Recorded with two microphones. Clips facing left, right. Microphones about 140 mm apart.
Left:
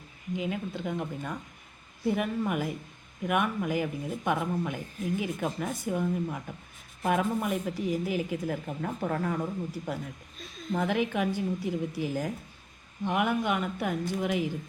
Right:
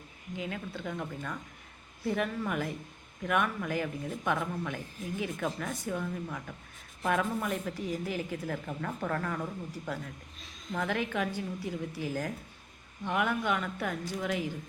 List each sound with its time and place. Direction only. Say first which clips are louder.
0.3 s a woman's voice: left 5 dB; 15° left (ahead or behind)